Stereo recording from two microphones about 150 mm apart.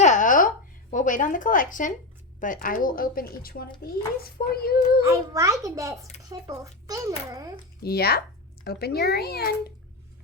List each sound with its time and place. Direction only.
0.0 s a sound: 55° left (ahead or behind)
2.4 s speech: 65° left (ahead or behind)
4.2 s a child's voice: 90° left
5.0 s a child's voice: 20° right (ahead or behind)
7.8 s a child's voice: 90° left